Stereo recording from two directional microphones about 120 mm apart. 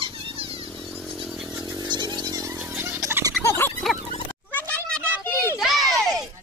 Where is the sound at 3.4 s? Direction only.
20° left (ahead or behind).